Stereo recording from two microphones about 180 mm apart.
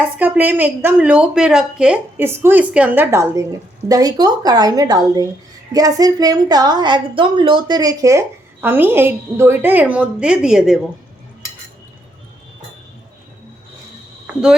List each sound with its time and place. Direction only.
0.2 s a woman's voice: 10° right (ahead or behind)